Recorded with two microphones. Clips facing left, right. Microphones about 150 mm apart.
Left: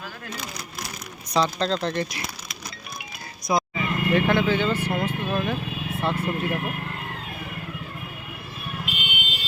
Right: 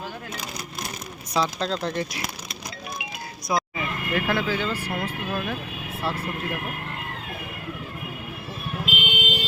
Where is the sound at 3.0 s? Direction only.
90° right.